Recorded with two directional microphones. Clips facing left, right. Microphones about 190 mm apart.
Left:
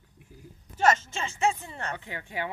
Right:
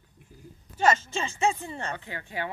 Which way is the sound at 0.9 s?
15° right (ahead or behind).